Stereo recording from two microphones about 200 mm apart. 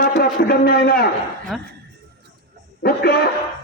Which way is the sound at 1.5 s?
Centre (ahead or behind).